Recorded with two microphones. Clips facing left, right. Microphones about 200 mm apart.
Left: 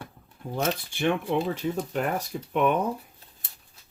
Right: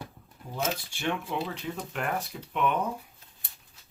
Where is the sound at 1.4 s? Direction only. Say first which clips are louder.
Left 7 dB; 45° left (ahead or behind).